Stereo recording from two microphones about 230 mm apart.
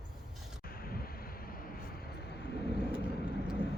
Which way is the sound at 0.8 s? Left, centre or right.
Left.